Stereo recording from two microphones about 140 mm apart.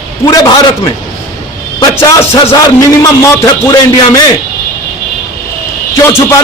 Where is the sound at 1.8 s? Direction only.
20° left (ahead or behind).